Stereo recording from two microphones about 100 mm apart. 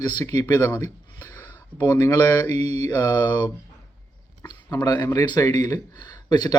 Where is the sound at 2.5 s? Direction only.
90° right.